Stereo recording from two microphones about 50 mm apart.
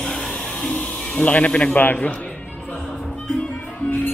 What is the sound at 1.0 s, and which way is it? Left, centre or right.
Speech, left.